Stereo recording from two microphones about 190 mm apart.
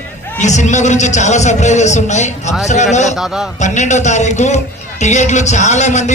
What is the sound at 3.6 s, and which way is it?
A man's voice, 40° left (ahead or behind).